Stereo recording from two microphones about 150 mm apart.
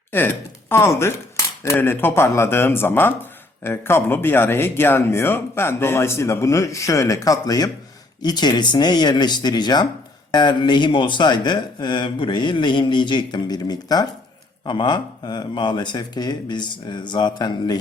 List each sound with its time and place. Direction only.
0.1 s speech: 15° left (ahead or behind)